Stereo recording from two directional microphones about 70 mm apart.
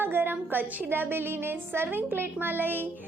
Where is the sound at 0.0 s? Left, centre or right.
Right.